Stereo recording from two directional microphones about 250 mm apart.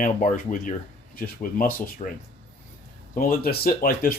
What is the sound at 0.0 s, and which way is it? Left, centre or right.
Speech, left.